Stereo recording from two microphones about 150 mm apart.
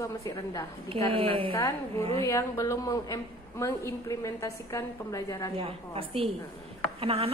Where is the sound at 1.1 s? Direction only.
40° right (ahead or behind).